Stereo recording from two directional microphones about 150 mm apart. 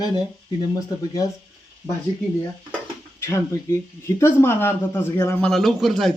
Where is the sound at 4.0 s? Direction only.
15° left (ahead or behind).